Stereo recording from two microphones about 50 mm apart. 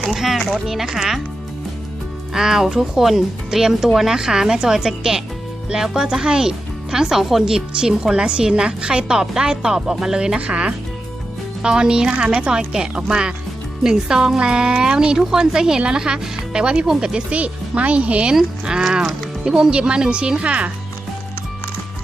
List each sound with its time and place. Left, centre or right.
0.0 s speech: centre
2.3 s speech: centre
7.7 s speech: centre
10.4 s speech: right
17.3 s speech: right
18.3 s speech: centre